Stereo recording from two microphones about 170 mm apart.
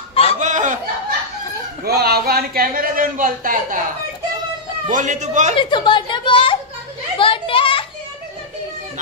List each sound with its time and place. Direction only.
0.1 s fowl: 35° left (ahead or behind)
0.4 s fowl: 45° right (ahead or behind)
1.9 s a sound: 65° right (ahead or behind)
4.8 s a man's voice: 50° right (ahead or behind)
5.6 s a woman's voice: 30° left (ahead or behind)
7.2 s children playing: 30° left (ahead or behind)